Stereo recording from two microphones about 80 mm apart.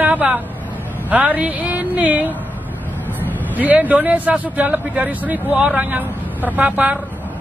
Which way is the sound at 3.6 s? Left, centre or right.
Right.